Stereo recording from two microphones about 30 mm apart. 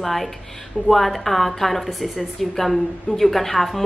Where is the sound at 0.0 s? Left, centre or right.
Centre.